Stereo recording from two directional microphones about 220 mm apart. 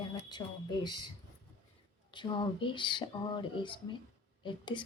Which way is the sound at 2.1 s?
20° left (ahead or behind).